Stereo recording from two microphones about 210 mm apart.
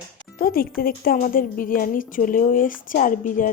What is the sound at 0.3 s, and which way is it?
Speech, 45° left (ahead or behind).